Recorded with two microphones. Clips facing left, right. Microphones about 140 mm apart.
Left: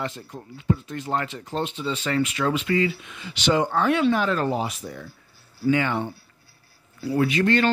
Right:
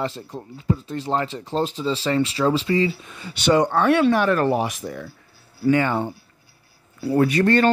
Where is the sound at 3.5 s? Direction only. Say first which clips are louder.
Right 4 dB; 65° right (ahead or behind); by 5.0 s 90° right.